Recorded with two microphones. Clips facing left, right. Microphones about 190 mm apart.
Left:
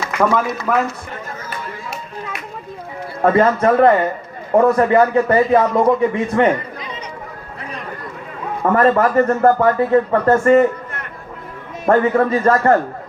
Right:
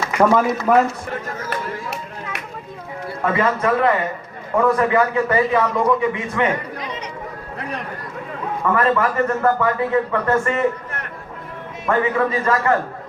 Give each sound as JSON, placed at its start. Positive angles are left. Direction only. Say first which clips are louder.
{"t": 0.7, "sound": "a man's voice", "louder": "right 3 dB", "side_deg": -25}
{"t": 3.2, "sound": "a man's voice", "louder": "left 6 dB", "side_deg": 40}
{"t": 8.7, "sound": "a man's voice", "louder": "left 6 dB", "side_deg": 40}
{"t": 11.9, "sound": "a man's voice", "louder": "left 5 dB", "side_deg": 40}